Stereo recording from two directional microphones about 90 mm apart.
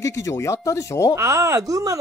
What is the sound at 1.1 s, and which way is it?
Speech, 35° right (ahead or behind).